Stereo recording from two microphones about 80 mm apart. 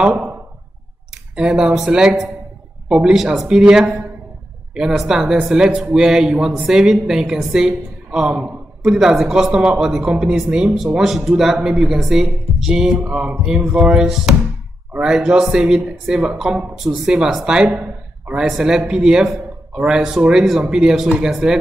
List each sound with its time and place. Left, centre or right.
0.0 s speech: centre